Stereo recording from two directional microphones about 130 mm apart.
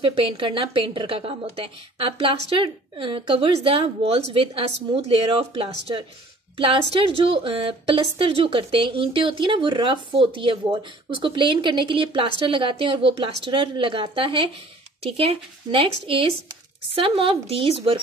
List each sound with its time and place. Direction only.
0.0 s a woman's voice: 45° right (ahead or behind)